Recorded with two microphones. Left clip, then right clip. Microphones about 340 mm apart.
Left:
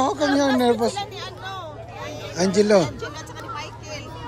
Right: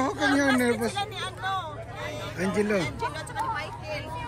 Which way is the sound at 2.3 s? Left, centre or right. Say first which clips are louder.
Left 10 dB; centre.